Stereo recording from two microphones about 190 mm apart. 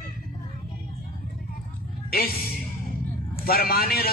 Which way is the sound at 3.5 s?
50° left (ahead or behind).